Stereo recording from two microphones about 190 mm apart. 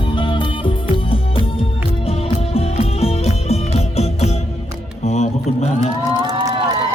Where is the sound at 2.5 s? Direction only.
30° left (ahead or behind).